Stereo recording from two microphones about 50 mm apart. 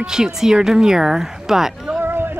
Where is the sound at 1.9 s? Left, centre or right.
Right.